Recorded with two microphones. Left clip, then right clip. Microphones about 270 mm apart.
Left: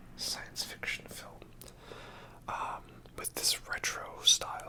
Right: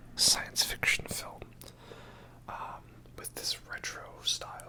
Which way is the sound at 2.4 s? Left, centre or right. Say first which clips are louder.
Left 4 dB; centre.